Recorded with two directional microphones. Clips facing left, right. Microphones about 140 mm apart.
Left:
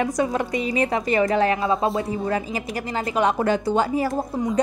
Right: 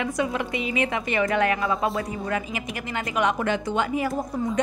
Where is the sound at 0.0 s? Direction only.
40° left (ahead or behind).